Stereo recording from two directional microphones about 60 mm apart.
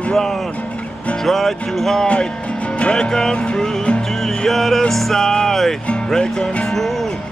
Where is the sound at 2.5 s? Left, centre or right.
Left; by 4.8 s centre.